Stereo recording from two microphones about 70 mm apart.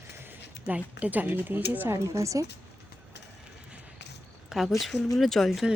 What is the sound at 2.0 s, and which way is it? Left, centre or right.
Speech, right.